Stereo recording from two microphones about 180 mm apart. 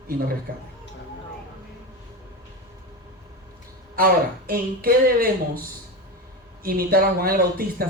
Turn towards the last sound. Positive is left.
turn(degrees=-55)  # may be behind; listen again after turning